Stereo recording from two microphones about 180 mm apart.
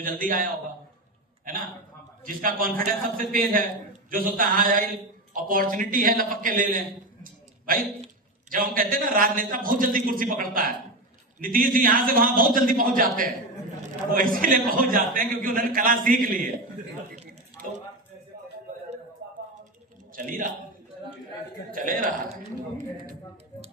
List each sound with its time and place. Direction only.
0.0 s a man's voice: 50° right (ahead or behind)
2.2 s a man's voice: 50° right (ahead or behind)
20.1 s a man's voice: 45° right (ahead or behind)
21.7 s a man's voice: 50° right (ahead or behind)